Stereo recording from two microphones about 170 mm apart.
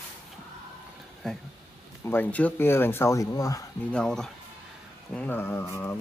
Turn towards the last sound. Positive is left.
turn(degrees=15)  # may be behind; listen again after turning